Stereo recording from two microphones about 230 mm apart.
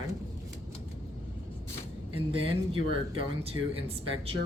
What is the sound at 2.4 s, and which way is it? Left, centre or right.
Speech, right.